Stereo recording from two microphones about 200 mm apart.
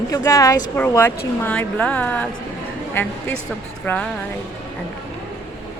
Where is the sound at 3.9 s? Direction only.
10° left (ahead or behind).